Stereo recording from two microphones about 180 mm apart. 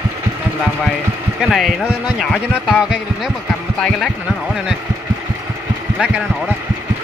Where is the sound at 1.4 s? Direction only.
Centre (ahead or behind).